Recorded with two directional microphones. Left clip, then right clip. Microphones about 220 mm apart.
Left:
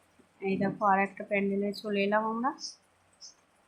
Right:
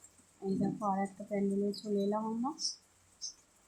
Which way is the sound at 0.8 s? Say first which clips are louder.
Left 9 dB; 10° left (ahead or behind).